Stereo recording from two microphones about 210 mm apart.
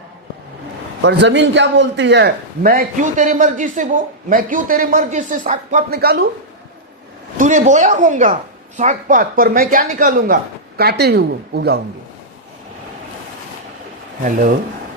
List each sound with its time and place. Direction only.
1.0 s a man's voice: 55° right (ahead or behind)
7.3 s a man's voice: 35° right (ahead or behind)
14.3 s speech: 40° right (ahead or behind)